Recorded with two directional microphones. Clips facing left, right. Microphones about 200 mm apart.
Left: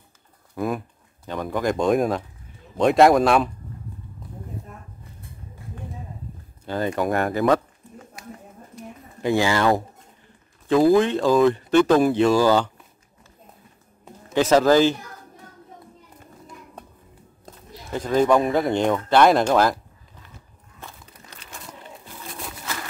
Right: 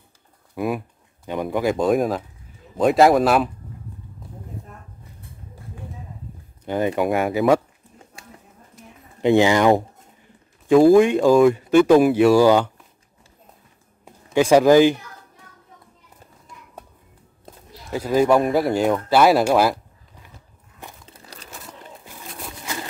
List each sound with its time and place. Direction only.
0.6 s speech: 5° right (ahead or behind)
6.6 s speech: 15° right (ahead or behind)
8.2 s a sound: 30° right (ahead or behind)
9.2 s speech: 20° right (ahead or behind)
11.0 s speech: 15° right (ahead or behind)
14.3 s speech: 10° right (ahead or behind)
17.5 s speech: 10° right (ahead or behind)
21.0 s a sound: 35° right (ahead or behind)